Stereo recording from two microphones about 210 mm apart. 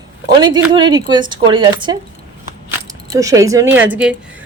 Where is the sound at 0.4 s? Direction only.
20° right (ahead or behind).